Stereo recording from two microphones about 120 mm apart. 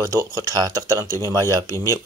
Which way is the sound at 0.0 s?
25° right (ahead or behind).